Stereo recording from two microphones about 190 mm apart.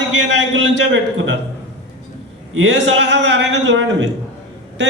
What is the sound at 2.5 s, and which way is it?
A man's voice, 70° right (ahead or behind).